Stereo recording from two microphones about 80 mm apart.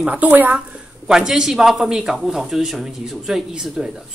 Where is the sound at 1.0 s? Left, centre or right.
Centre.